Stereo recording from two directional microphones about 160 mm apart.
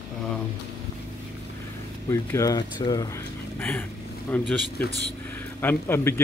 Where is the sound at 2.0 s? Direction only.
20° left (ahead or behind).